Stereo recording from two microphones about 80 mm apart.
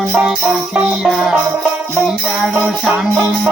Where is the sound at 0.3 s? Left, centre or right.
Centre.